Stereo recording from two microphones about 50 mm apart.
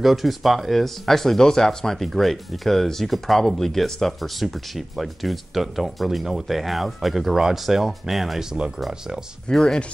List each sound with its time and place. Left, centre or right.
0.0 s speech: centre
9.5 s speech: centre